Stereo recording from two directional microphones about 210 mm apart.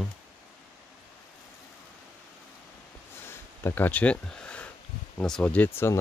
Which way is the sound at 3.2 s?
10° left (ahead or behind).